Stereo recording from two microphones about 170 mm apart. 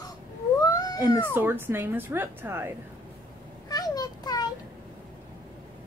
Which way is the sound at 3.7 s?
20° left (ahead or behind).